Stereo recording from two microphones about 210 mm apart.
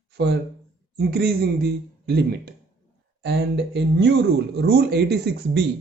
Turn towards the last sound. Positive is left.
turn(degrees=-50)  # may be behind; listen again after turning